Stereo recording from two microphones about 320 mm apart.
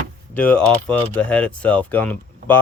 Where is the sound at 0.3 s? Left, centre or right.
Centre.